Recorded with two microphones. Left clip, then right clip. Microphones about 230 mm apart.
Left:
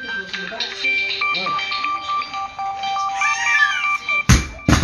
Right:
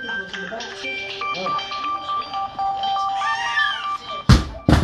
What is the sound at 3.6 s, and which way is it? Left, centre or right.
Music, centre.